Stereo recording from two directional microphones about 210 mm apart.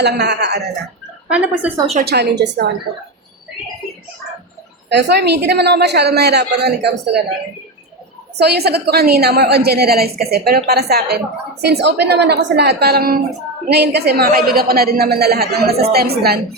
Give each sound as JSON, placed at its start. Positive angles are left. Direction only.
{"t": 0.0, "sound": "a woman's voice", "side_deg": -50}
{"t": 1.3, "sound": "a woman's voice", "side_deg": -5}
{"t": 2.0, "sound": "a woman's voice", "side_deg": -55}
{"t": 4.9, "sound": "a woman's voice", "side_deg": -55}
{"t": 8.4, "sound": "a woman's voice", "side_deg": -50}